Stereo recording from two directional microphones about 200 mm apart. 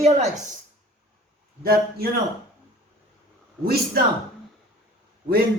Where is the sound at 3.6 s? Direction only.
50° right (ahead or behind).